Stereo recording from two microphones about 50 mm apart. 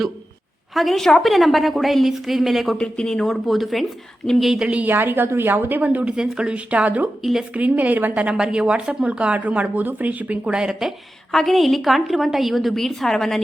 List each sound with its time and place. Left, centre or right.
0.7 s a woman's voice: centre
2.7 s speech: centre
3.2 s a woman's voice: centre
4.9 s a woman's voice: right
6.1 s speech: centre
10.5 s speech: centre
11.3 s a woman's voice: centre